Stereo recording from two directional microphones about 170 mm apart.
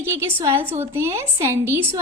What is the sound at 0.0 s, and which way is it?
A woman's voice, 15° right (ahead or behind).